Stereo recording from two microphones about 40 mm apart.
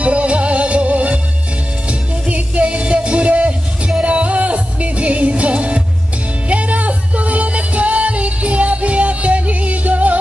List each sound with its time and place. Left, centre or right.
0.0 s music: right